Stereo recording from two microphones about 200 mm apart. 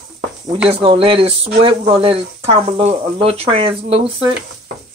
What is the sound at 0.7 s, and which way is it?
Speech, 25° right (ahead or behind).